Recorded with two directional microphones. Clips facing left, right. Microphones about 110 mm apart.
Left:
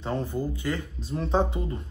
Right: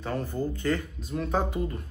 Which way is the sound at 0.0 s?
20° left (ahead or behind).